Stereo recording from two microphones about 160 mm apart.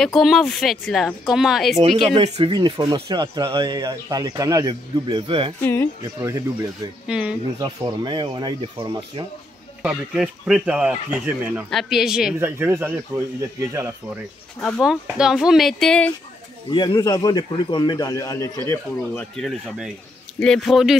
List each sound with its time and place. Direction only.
0.0 s speech: centre (ahead or behind)
2.1 s speech: 40° right (ahead or behind)
2.5 s speech: 25° right (ahead or behind)
5.6 s speech: 15° left (ahead or behind)
6.2 s speech: 20° right (ahead or behind)
7.1 s speech: 5° right (ahead or behind)
7.5 s speech: 25° right (ahead or behind)
9.8 s speech: 5° right (ahead or behind)
12.4 s speech: 15° right (ahead or behind)
14.6 s speech: centre (ahead or behind)
16.7 s a man's voice: 30° left (ahead or behind)
18.7 s speech: 5° left (ahead or behind)